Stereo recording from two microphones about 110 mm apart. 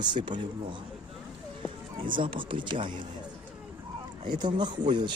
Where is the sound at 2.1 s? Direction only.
50° right (ahead or behind).